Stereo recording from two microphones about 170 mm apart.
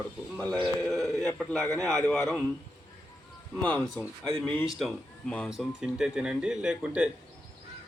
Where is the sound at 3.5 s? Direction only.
5° left (ahead or behind).